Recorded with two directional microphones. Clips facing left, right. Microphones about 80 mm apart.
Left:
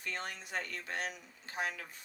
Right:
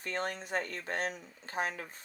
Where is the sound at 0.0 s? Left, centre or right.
Right.